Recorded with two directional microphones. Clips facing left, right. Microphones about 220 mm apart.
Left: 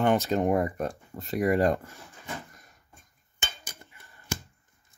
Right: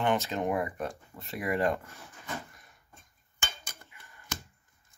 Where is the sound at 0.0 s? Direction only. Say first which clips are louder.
Left 5 dB; 45° left (ahead or behind).